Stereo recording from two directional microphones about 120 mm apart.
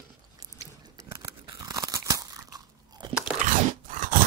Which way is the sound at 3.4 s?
90° right.